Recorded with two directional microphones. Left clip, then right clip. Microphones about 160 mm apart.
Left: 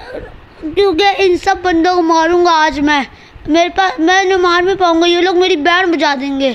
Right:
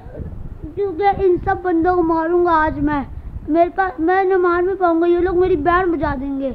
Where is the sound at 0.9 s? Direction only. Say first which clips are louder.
Left 5 dB; 50° left (ahead or behind).